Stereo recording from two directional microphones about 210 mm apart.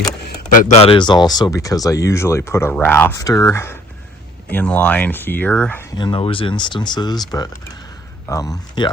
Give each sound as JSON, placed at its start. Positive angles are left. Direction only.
{"t": 0.5, "sound": "speech", "side_deg": 35}
{"t": 6.0, "sound": "speech", "side_deg": 25}